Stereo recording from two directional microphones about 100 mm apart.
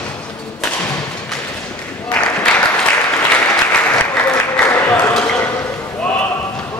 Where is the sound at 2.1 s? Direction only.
10° left (ahead or behind).